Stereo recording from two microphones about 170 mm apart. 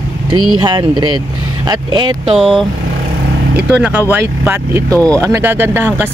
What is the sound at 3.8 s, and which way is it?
Speech, 10° right (ahead or behind).